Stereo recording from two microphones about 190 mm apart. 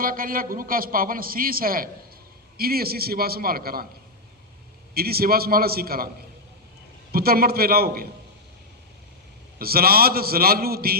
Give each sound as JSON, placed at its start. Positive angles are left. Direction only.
{"t": 0.0, "sound": "a man's voice", "side_deg": -50}
{"t": 4.9, "sound": "a man's voice", "side_deg": -55}
{"t": 7.1, "sound": "a man's voice", "side_deg": -50}
{"t": 9.6, "sound": "a man's voice", "side_deg": -50}